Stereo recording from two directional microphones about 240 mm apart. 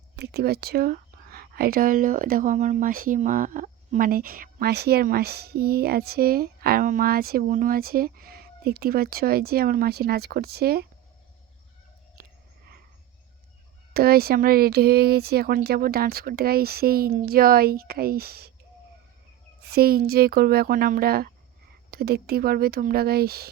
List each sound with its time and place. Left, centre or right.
0.2 s speech: right
12.2 s a sound: right
13.9 s speech: right
19.7 s speech: right